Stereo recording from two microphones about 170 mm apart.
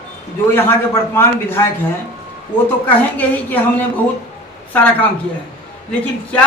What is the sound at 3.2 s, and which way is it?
Speech, 10° left (ahead or behind).